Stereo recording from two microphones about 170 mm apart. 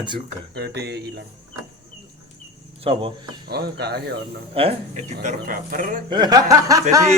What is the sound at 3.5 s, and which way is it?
Speech, 70° right (ahead or behind).